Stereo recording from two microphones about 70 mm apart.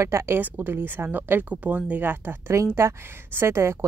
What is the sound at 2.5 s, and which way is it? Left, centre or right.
A woman's voice, right.